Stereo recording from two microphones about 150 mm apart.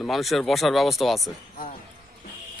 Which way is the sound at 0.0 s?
Centre (ahead or behind).